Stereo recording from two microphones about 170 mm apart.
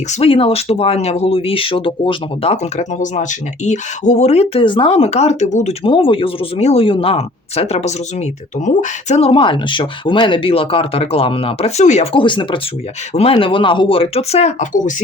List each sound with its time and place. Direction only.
0.1 s speech: 35° left (ahead or behind)
5.8 s speech: 30° left (ahead or behind)
12.2 s speech: 30° left (ahead or behind); by 15.0 s 50° left (ahead or behind)